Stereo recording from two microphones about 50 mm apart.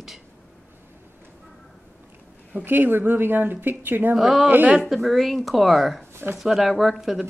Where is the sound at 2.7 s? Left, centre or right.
Right.